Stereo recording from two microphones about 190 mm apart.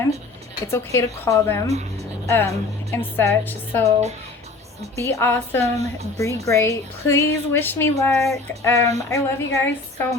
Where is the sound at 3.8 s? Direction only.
35° right (ahead or behind).